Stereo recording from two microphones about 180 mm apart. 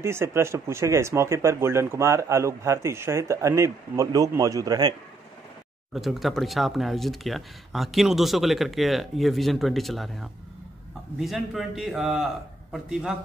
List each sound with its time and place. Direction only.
0.0 s speech: 15° right (ahead or behind)
5.9 s speech: centre (ahead or behind)